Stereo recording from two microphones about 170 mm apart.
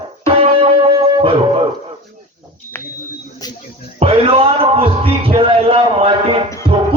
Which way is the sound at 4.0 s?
35° right (ahead or behind).